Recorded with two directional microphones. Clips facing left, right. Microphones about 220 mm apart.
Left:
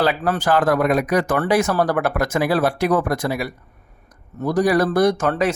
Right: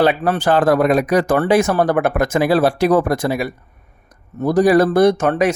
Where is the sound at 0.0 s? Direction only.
25° right (ahead or behind).